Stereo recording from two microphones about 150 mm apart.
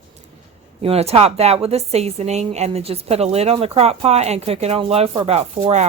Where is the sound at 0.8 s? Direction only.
45° right (ahead or behind).